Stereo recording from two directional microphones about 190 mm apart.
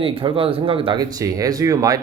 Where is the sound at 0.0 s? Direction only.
30° right (ahead or behind).